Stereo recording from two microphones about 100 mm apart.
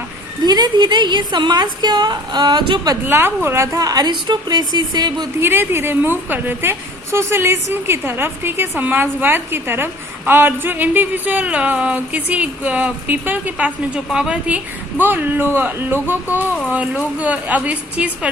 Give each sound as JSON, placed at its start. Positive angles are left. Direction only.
{"t": 0.4, "sound": "a woman's voice", "side_deg": -45}
{"t": 3.1, "sound": "a woman's voice", "side_deg": -20}
{"t": 3.8, "sound": "a woman's voice", "side_deg": -40}
{"t": 5.4, "sound": "a woman's voice", "side_deg": -20}